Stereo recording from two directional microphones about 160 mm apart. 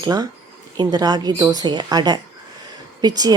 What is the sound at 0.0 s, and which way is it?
A woman's voice, 25° right (ahead or behind).